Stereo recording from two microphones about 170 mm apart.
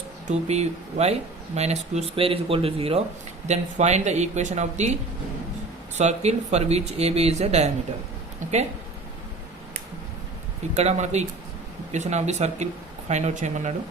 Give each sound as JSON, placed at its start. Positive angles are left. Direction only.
{"t": 0.3, "sound": "speech", "side_deg": -40}
{"t": 10.8, "sound": "speech", "side_deg": -40}